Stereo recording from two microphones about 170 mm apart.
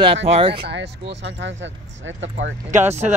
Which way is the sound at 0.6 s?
80° right.